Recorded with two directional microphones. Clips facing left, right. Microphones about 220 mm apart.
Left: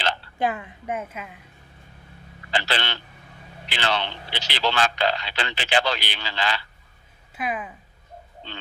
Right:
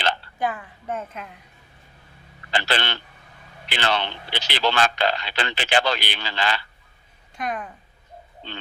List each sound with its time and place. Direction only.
0.3 s a woman's voice: 25° left (ahead or behind)
0.9 s a woman's voice: 10° left (ahead or behind)
2.5 s speech: 50° right (ahead or behind)
7.3 s a woman's voice: 5° left (ahead or behind)